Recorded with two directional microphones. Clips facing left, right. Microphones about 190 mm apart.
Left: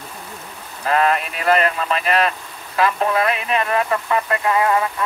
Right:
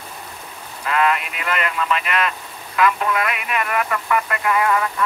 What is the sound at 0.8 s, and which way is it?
Speech, 35° left (ahead or behind).